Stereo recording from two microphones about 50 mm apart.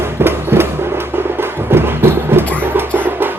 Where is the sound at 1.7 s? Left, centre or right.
Right.